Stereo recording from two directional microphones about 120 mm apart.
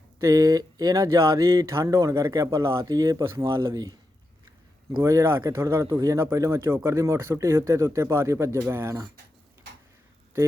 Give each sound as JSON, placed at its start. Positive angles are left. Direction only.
{"t": 0.2, "sound": "speech", "side_deg": -25}
{"t": 4.9, "sound": "speech", "side_deg": -25}